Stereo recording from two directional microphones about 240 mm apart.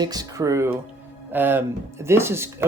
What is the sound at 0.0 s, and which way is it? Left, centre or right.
A man's voice, centre.